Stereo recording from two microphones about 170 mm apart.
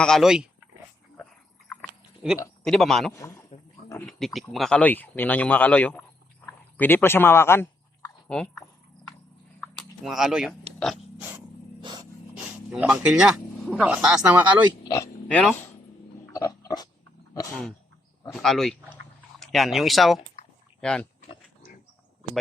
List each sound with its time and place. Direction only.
0.0 s speech: centre (ahead or behind)
1.2 s a sound: centre (ahead or behind)
2.2 s speech: 5° right (ahead or behind)
3.2 s a man's voice: 20° left (ahead or behind)
4.0 s speech: centre (ahead or behind)
9.6 s a sound: centre (ahead or behind)
11.8 s a sound: 25° right (ahead or behind)
12.7 s speech: 5° right (ahead or behind)
14.8 s speech: 20° left (ahead or behind)
15.3 s speech: 5° left (ahead or behind)
16.3 s pig: 20° left (ahead or behind)
18.3 s speech: centre (ahead or behind)